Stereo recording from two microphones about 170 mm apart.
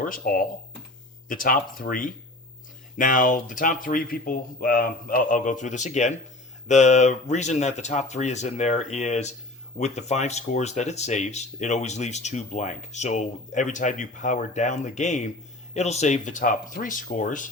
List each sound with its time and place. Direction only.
0.0 s speech: 55° left (ahead or behind)